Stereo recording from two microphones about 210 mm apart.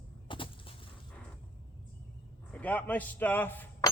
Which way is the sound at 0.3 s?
25° left (ahead or behind).